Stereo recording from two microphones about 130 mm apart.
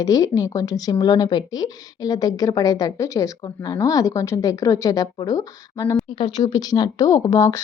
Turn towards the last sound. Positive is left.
turn(degrees=25)  # may be behind; listen again after turning